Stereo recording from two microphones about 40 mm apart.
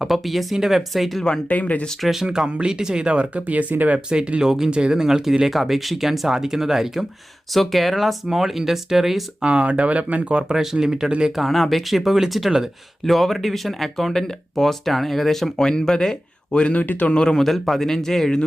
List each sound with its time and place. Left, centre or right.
0.1 s speech: centre
1.5 s a man's voice: left
2.0 s speech: centre
2.2 s speech: centre; by 3.9 s right
3.9 s speech: right
7.5 s speech: centre
9.4 s speech: right
10.5 s speech: centre
11.4 s speech: centre; by 16.7 s left
16.7 s a man's voice: left
17.1 s speech: left
17.3 s a man's voice: centre